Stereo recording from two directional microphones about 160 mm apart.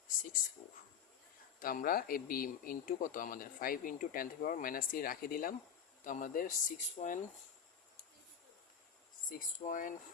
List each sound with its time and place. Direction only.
1.5 s a man's voice: 60° left (ahead or behind)
9.3 s a man's voice: 55° left (ahead or behind)